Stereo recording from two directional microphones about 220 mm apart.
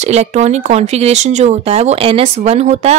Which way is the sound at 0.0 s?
30° right (ahead or behind).